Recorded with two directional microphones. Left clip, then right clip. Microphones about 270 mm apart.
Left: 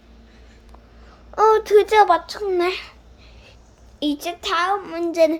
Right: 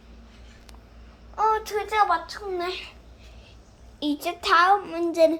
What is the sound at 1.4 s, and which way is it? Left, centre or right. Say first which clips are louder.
A child's voice: left 9 dB; centre.